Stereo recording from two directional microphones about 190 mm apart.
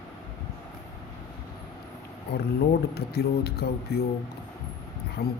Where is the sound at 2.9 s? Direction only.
55° left (ahead or behind).